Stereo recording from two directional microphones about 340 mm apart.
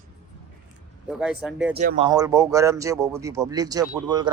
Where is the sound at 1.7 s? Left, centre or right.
Centre.